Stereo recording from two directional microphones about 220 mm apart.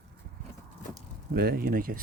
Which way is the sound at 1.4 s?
45° right (ahead or behind).